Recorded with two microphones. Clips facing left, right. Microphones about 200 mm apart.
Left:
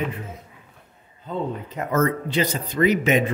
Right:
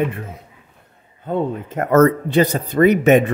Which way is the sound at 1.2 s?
55° right (ahead or behind).